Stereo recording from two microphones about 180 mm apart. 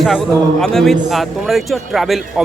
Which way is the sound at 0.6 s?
Centre (ahead or behind).